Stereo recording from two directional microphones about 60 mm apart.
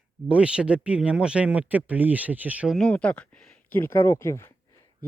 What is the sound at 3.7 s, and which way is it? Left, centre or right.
Speech, left.